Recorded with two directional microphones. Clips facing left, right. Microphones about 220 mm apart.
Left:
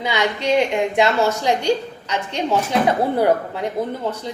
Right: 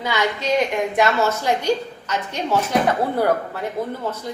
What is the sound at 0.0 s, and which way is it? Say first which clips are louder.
A woman's voice: left 1 dB; 15° left (ahead or behind).